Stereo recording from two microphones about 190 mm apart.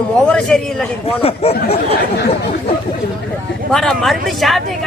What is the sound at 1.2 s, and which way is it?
Speech, 30° left (ahead or behind).